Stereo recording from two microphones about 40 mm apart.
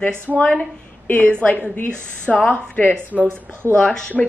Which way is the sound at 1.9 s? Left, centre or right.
Left.